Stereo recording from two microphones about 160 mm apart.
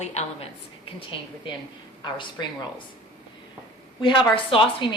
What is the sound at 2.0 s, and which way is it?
Speech, 30° left (ahead or behind).